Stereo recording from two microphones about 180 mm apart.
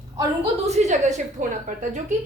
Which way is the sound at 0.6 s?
40° right (ahead or behind).